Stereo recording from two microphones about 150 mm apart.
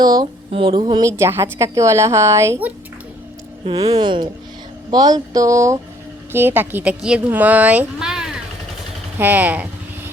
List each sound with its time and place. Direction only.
0.0 s a woman's voice: 25° right (ahead or behind)
1.1 s a woman's voice: 15° right (ahead or behind)
3.7 s a woman's voice: 25° right (ahead or behind); by 9.6 s 10° right (ahead or behind)